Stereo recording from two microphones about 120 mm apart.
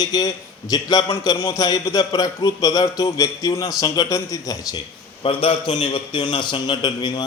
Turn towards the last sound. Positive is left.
turn(degrees=40)  # may be behind; listen again after turning